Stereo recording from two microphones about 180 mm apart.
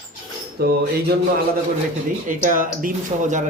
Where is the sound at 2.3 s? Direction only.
45° right (ahead or behind).